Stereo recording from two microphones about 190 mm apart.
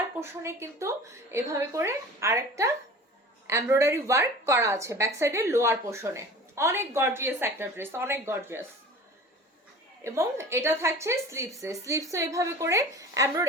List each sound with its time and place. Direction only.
0.2 s a woman's voice: 15° right (ahead or behind)
10.0 s a woman's voice: 15° right (ahead or behind)